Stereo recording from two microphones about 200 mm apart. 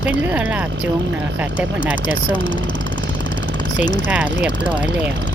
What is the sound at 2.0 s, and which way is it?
Speech, 45° left (ahead or behind).